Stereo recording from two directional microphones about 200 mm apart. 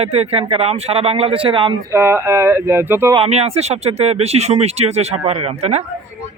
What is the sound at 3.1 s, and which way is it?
Speech, 30° right (ahead or behind).